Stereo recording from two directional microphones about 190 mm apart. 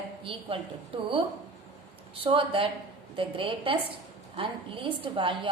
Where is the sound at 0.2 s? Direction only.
30° right (ahead or behind).